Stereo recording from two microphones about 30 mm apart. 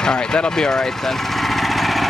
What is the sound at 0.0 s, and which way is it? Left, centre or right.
Speech, left.